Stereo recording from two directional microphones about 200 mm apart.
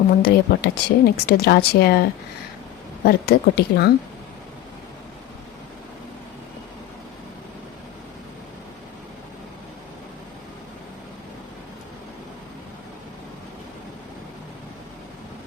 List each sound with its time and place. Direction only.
0.2 s speech: 50° left (ahead or behind)
3.0 s speech: 55° left (ahead or behind)